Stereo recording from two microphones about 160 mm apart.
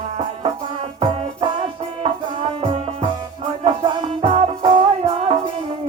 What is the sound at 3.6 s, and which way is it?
Music, 35° right (ahead or behind).